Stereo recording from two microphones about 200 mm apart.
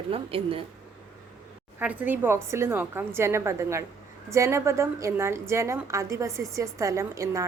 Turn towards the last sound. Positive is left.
turn(degrees=-15)  # may be behind; listen again after turning